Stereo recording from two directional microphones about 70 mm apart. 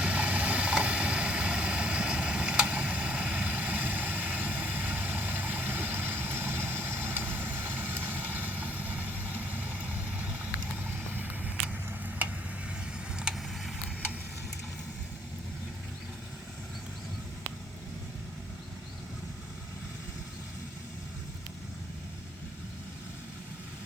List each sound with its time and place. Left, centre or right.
0.0 s vehicle: centre
13.1 s vehicle: centre